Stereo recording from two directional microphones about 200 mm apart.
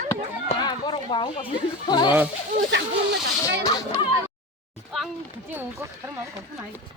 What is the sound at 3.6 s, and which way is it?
Speech, 25° left (ahead or behind).